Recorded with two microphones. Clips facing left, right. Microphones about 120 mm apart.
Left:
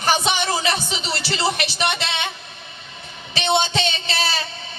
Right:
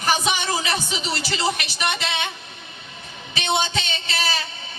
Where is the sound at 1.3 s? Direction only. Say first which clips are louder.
Left 4 dB; 30° left (ahead or behind).